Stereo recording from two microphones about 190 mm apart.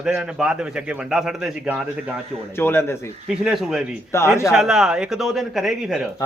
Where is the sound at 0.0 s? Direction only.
5° right (ahead or behind).